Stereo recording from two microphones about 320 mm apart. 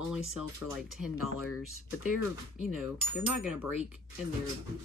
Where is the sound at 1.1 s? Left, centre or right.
Left.